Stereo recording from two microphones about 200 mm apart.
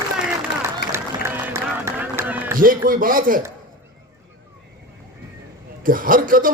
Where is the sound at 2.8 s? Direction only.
45° right (ahead or behind).